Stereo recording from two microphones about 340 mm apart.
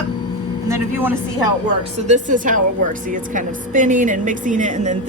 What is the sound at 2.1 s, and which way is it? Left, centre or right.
A woman's voice, right.